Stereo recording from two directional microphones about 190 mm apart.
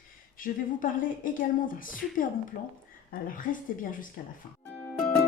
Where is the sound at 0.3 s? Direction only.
45° left (ahead or behind).